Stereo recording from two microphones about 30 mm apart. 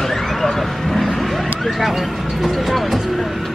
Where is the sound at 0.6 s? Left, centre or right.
Centre.